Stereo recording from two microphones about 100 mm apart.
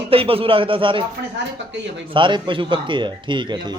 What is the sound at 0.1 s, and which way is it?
Speech, 70° right (ahead or behind).